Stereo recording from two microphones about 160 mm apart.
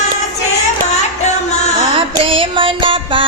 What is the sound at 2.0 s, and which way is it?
Music, 35° right (ahead or behind).